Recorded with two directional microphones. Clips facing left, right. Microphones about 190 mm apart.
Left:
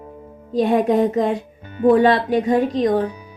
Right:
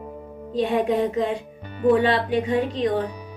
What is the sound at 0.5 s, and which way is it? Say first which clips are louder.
A woman's voice: left 5 dB; 45° left (ahead or behind).